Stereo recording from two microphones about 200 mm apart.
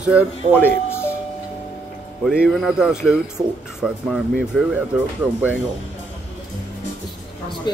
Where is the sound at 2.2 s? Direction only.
Centre (ahead or behind).